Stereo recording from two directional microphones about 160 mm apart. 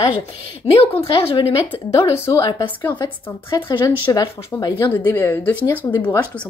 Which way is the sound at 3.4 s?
30° left (ahead or behind).